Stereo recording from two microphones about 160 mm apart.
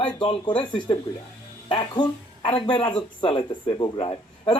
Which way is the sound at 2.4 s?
30° left (ahead or behind).